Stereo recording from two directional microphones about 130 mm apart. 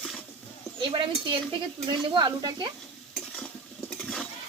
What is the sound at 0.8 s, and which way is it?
Speech, 35° right (ahead or behind).